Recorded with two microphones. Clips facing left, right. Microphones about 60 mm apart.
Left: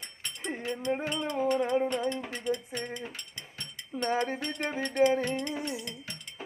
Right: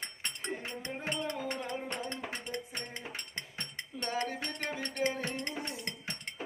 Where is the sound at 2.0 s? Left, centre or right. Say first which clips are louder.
Left 8 dB; right.